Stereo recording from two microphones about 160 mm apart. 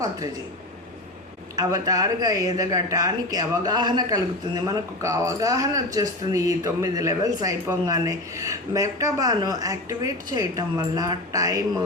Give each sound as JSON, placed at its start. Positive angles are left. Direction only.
{"t": 1.5, "sound": "speech", "side_deg": -25}